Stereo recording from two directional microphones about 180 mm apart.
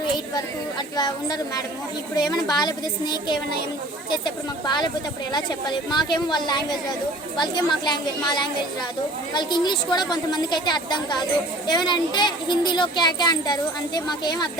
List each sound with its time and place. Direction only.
0.9 s speech: 20° left (ahead or behind)
4.6 s speech: 25° left (ahead or behind)